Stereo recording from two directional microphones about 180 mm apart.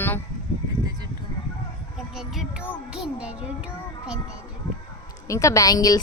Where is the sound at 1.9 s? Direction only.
5° right (ahead or behind).